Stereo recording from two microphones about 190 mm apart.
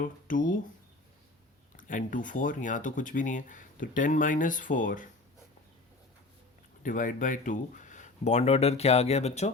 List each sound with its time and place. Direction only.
0.0 s speech: 45° left (ahead or behind)
1.7 s speech: 45° left (ahead or behind)
6.8 s speech: 45° left (ahead or behind)